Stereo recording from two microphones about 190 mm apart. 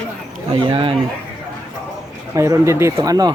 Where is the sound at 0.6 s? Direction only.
25° right (ahead or behind).